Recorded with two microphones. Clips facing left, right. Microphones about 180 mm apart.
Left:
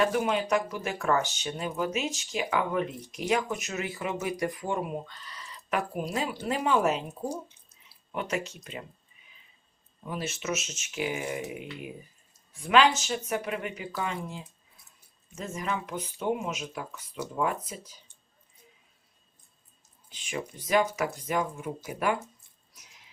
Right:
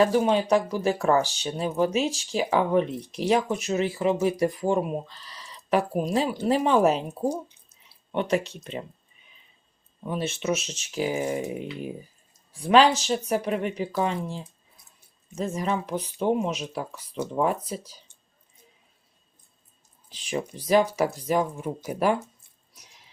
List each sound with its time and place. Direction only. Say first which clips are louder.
0.0 s speech: right 5 dB; 30° right (ahead or behind)
10.1 s speech: right 6 dB; 25° right (ahead or behind)
20.1 s speech: right 5 dB; 35° right (ahead or behind)